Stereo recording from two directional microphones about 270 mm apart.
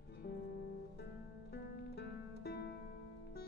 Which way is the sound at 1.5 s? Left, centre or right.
Left.